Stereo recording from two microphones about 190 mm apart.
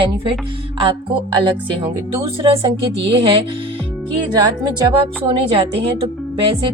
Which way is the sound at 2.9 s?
65° right (ahead or behind).